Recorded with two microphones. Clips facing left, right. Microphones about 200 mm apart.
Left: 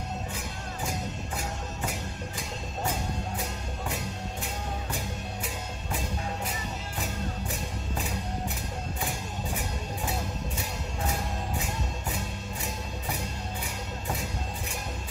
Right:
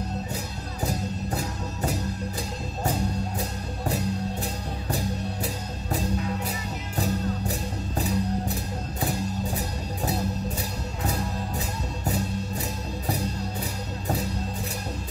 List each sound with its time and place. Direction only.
0.8 s music: 35° right (ahead or behind)
9.6 s music: 35° right (ahead or behind)